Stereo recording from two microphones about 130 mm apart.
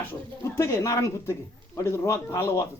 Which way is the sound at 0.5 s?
20° left (ahead or behind).